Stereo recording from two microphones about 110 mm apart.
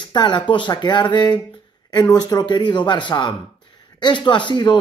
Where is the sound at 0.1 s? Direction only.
45° left (ahead or behind).